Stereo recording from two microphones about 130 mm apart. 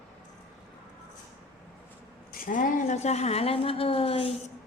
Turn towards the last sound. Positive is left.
turn(degrees=50)  # may be behind; listen again after turning